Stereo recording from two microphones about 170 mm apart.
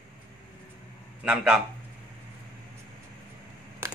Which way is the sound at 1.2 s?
5° right (ahead or behind).